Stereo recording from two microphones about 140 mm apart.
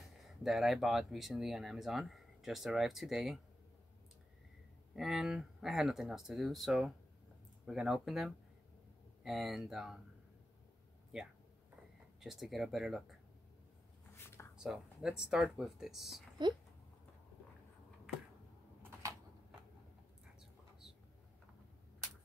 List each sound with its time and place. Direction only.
0.0 s speech: centre (ahead or behind)
4.9 s speech: centre (ahead or behind)
12.2 s speech: centre (ahead or behind)
14.1 s a sound: 20° left (ahead or behind)
14.6 s speech: 5° right (ahead or behind)
18.8 s a sound: 15° right (ahead or behind)